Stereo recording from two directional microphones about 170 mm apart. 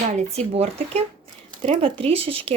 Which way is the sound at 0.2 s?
40° right (ahead or behind).